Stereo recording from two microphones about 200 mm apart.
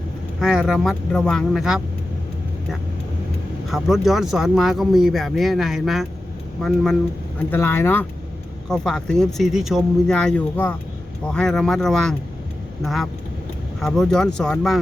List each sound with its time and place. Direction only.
0.3 s speech: 5° right (ahead or behind)
3.7 s speech: centre (ahead or behind)
7.5 s speech: 10° left (ahead or behind)